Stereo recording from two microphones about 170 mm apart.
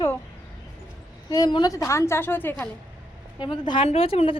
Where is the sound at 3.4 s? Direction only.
25° left (ahead or behind).